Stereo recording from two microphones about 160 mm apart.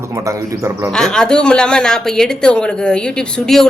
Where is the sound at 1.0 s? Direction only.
5° left (ahead or behind).